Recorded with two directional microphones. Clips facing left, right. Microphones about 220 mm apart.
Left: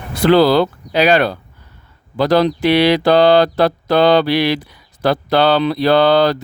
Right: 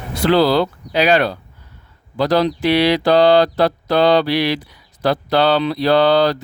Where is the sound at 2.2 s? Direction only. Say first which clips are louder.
Left 2 dB; 55° left (ahead or behind).